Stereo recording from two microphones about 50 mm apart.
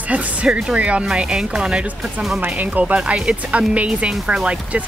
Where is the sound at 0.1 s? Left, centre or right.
Right.